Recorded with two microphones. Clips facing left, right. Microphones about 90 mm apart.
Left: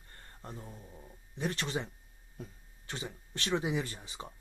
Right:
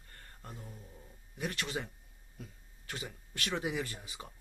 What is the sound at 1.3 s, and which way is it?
Speech, 30° left (ahead or behind).